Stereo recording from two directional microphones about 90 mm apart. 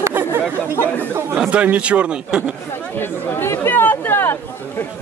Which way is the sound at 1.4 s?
15° right (ahead or behind).